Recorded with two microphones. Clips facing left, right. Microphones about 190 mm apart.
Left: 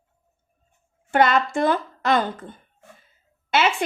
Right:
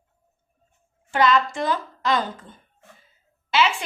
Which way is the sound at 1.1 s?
55° left (ahead or behind).